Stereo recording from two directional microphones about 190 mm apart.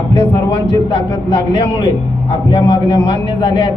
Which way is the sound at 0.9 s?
25° left (ahead or behind).